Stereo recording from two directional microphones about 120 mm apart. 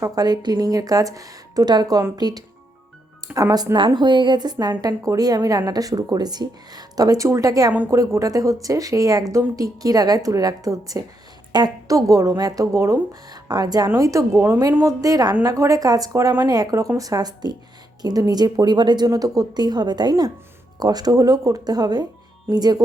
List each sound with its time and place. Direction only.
0.0 s a woman's voice: 35° right (ahead or behind); by 14.9 s 20° right (ahead or behind)
15.0 s a woman's voice: 30° right (ahead or behind)